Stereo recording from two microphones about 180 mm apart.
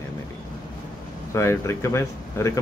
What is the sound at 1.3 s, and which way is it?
Speech, 15° left (ahead or behind).